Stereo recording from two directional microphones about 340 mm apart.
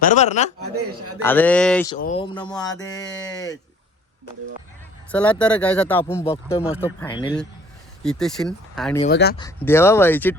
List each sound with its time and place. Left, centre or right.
0.0 s a man's voice: left
0.6 s speech: right
1.2 s speech: centre
2.0 s speech: centre
5.1 s speech: centre
8.0 s speech: centre
9.0 s a man's voice: left
9.4 s speech: centre